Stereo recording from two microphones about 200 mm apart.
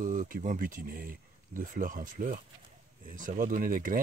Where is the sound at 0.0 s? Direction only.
40° right (ahead or behind).